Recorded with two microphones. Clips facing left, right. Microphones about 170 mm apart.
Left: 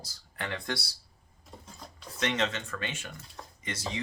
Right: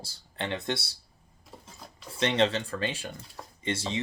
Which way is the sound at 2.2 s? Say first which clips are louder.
Right 5 dB; 30° right (ahead or behind).